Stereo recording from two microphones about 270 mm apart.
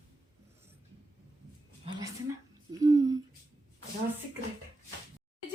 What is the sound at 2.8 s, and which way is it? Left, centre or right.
Speech, centre.